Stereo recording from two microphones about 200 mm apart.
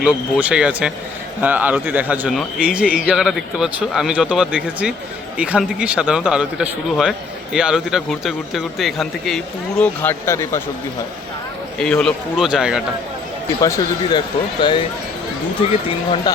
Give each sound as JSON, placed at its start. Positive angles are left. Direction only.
{"t": 0.0, "sound": "a man's voice", "side_deg": -5}
{"t": 11.8, "sound": "speech", "side_deg": 5}
{"t": 13.6, "sound": "speech", "side_deg": 15}
{"t": 16.3, "sound": "speech", "side_deg": 20}